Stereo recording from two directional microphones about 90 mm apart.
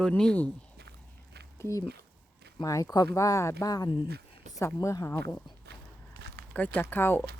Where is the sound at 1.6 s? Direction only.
35° left (ahead or behind).